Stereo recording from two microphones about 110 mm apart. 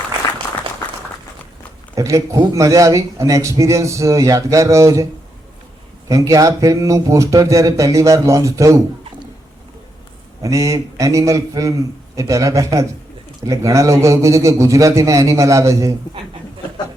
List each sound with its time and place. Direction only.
2.0 s speech: 30° right (ahead or behind)
6.1 s speech: 30° right (ahead or behind)
10.4 s speech: 30° right (ahead or behind)